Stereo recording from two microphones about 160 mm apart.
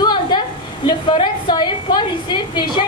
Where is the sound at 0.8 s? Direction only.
30° left (ahead or behind).